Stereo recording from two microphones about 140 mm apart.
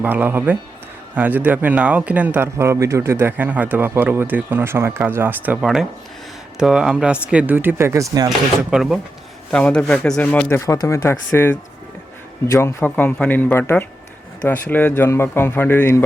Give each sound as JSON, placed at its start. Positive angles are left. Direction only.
{"t": 0.0, "sound": "speech", "side_deg": -15}
{"t": 8.7, "sound": "speech", "side_deg": 0}